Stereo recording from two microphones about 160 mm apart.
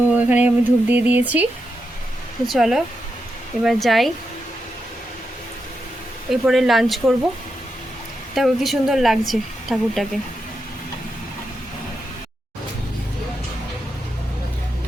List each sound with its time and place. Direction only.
0.1 s speech: 10° right (ahead or behind)
2.5 s a woman's voice: centre (ahead or behind)
6.3 s a woman's voice: centre (ahead or behind)
8.4 s a woman's voice: centre (ahead or behind)